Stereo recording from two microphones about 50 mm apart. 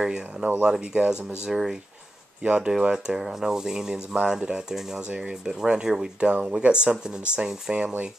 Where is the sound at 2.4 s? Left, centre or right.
Right.